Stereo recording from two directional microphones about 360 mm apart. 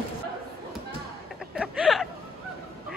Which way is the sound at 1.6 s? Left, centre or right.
Centre.